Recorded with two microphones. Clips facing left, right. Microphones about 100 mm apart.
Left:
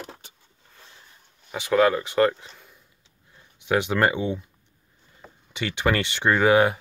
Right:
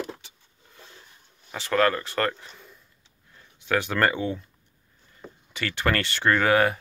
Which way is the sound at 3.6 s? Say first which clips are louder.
Left 2 dB; 15° left (ahead or behind).